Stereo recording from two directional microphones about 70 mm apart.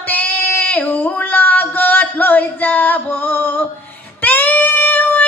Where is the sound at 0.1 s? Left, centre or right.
Left.